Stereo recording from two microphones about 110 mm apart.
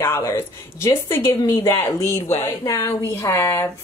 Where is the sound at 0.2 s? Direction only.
30° left (ahead or behind).